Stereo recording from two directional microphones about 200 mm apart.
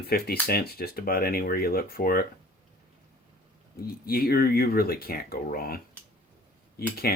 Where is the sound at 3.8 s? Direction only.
50° left (ahead or behind).